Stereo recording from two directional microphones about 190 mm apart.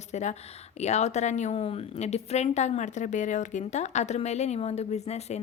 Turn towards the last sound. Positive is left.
turn(degrees=35)  # may be behind; listen again after turning